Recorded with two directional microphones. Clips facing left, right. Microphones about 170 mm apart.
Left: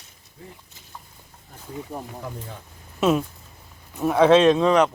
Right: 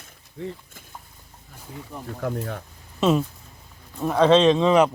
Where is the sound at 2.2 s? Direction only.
75° right (ahead or behind).